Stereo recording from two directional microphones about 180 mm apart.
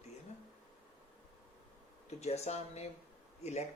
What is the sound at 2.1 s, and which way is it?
Speech, 35° left (ahead or behind).